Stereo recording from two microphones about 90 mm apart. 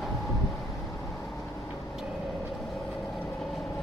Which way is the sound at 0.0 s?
Centre (ahead or behind).